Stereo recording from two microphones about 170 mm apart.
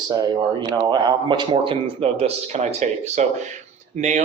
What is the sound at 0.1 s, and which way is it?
A man's voice, 25° right (ahead or behind).